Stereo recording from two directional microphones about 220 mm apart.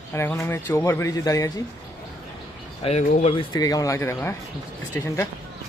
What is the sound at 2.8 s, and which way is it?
Speech, 30° left (ahead or behind).